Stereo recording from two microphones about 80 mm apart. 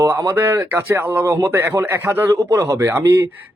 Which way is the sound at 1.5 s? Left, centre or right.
Right.